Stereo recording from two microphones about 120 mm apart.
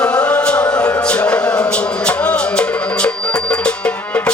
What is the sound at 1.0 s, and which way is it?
Music, 10° left (ahead or behind).